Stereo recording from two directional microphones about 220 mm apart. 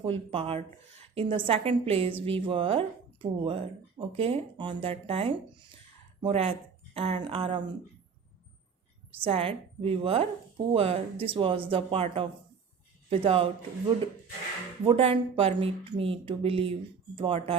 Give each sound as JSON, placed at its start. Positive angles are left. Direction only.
{"t": 0.0, "sound": "a woman's voice", "side_deg": -25}
{"t": 9.2, "sound": "a woman's voice", "side_deg": -25}
{"t": 14.8, "sound": "a woman's voice", "side_deg": -25}